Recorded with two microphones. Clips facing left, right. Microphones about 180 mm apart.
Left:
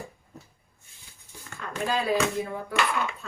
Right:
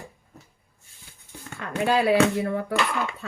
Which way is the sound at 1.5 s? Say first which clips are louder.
Right 6 dB; 70° right (ahead or behind).